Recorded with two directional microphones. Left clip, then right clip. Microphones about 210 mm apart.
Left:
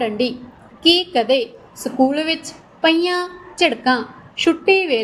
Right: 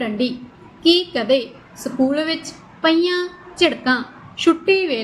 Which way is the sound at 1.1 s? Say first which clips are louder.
Left 2 dB; 20° left (ahead or behind).